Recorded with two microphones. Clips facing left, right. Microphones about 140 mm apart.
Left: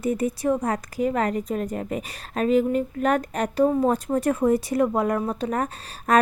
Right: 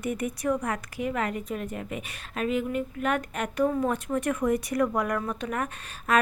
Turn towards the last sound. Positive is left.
turn(degrees=35)  # may be behind; listen again after turning